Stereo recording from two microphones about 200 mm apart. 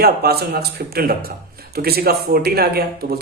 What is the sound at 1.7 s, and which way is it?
Speech, 50° right (ahead or behind).